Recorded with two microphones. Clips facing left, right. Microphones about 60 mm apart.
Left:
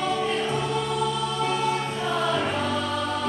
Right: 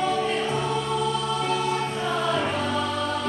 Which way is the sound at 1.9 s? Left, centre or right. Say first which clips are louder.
Even; centre.